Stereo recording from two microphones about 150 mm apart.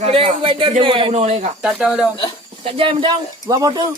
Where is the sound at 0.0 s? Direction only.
40° right (ahead or behind).